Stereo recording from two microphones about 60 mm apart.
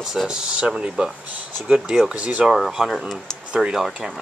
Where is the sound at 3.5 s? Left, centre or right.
Centre.